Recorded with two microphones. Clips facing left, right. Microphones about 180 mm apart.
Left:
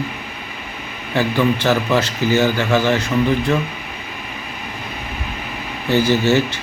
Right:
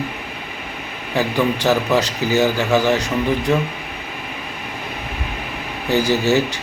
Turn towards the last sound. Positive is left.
turn(degrees=-15)  # may be behind; listen again after turning